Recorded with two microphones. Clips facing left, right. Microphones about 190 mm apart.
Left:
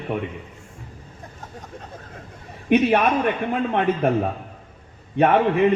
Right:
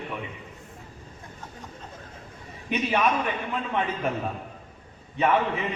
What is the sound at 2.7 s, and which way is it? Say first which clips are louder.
A man's voice: left 7 dB; 55° left (ahead or behind).